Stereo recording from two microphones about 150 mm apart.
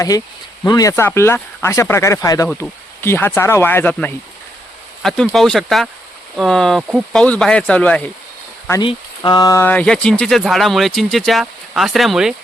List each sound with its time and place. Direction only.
0.6 s speech: 20° left (ahead or behind)
8.8 s speech: 30° left (ahead or behind); by 12.3 s centre (ahead or behind)